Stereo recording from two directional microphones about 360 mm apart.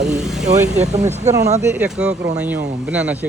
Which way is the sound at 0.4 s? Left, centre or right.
Centre.